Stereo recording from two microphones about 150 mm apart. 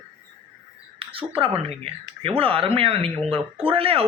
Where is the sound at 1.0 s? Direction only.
35° right (ahead or behind).